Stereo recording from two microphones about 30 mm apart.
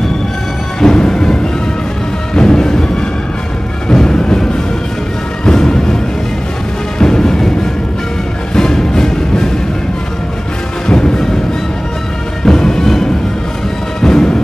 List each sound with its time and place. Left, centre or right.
0.7 s music: left
3.9 s music: left
5.4 s music: left
7.0 s music: left
8.5 s music: left
10.9 s music: left
12.4 s music: left